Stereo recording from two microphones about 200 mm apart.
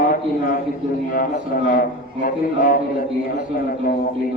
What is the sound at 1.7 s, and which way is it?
Speech, 45° left (ahead or behind).